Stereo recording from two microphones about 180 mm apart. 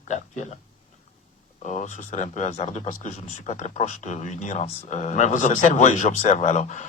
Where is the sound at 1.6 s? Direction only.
40° left (ahead or behind).